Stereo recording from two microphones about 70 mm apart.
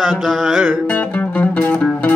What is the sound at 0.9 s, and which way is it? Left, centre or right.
Music, left.